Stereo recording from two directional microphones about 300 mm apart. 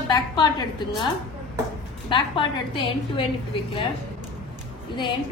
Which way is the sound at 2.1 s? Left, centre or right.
Centre.